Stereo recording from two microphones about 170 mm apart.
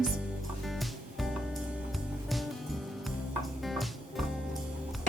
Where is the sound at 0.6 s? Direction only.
Centre (ahead or behind).